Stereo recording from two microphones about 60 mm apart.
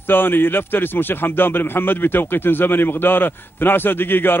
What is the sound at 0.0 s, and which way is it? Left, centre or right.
A man's voice, left.